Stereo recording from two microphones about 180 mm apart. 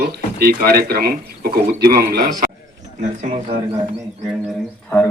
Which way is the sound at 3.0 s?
45° right (ahead or behind).